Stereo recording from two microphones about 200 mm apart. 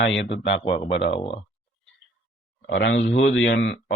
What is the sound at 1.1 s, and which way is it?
Speech, 30° left (ahead or behind).